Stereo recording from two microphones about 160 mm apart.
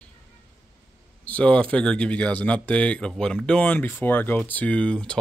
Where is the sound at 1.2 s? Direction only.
10° left (ahead or behind).